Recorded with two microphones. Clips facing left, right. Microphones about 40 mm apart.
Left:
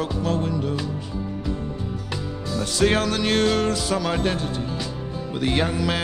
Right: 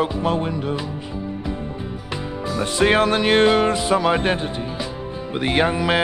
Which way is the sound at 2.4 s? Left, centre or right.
Right.